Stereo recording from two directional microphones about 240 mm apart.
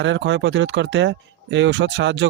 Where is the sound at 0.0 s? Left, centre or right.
Right.